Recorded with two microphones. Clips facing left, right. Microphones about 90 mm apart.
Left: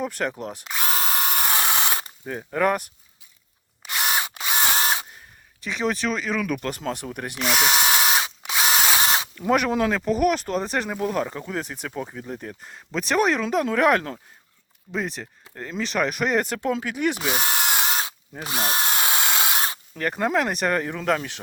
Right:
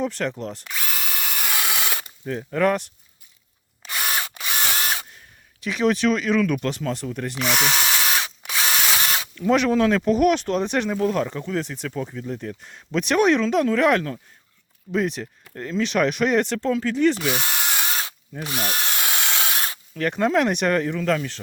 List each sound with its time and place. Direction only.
0.0 s speech: 10° left (ahead or behind)
0.7 s drill: 35° left (ahead or behind)
2.2 s speech: 10° left (ahead or behind)
3.8 s drill: 15° left (ahead or behind)
5.1 s a sound: centre (ahead or behind)
6.4 s speech: 5° left (ahead or behind)
7.7 s drill: 20° left (ahead or behind)
9.5 s speech: 15° left (ahead or behind)
10.0 s speech: centre (ahead or behind)
11.9 s speech: 20° left (ahead or behind)
17.2 s drill: 25° left (ahead or behind)
20.0 s speech: 10° left (ahead or behind)
20.8 s speech: 15° left (ahead or behind)